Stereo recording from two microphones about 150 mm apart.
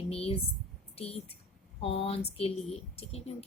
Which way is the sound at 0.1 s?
40° left (ahead or behind).